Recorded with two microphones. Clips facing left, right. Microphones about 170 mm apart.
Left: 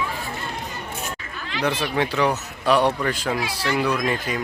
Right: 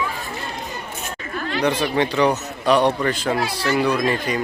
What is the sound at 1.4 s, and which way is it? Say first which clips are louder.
Chatter: right 7 dB; 45° right (ahead or behind).